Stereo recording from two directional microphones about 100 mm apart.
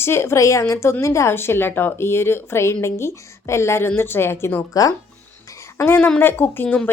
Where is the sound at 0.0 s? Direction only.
25° left (ahead or behind).